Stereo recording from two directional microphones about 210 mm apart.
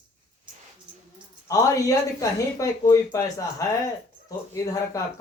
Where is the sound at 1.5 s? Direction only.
15° left (ahead or behind).